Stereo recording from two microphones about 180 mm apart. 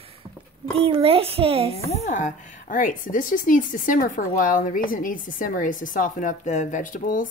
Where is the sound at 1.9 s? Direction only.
40° left (ahead or behind).